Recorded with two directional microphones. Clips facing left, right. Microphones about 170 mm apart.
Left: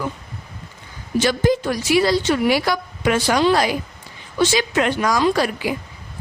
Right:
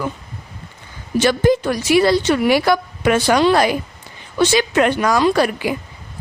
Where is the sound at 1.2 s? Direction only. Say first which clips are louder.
Right 3 dB; 60° right (ahead or behind).